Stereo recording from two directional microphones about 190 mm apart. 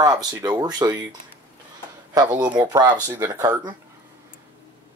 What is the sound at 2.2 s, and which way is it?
Speech, 10° right (ahead or behind).